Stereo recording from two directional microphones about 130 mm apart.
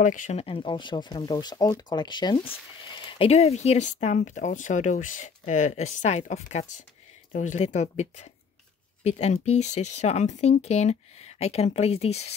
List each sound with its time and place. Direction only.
0.0 s speech: 80° left
0.4 s speech: 45° left (ahead or behind)